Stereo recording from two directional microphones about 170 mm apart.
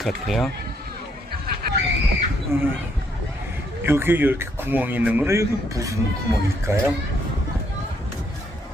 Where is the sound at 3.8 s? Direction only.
15° right (ahead or behind).